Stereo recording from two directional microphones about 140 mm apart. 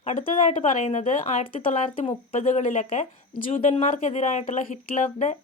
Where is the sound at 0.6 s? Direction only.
60° left (ahead or behind).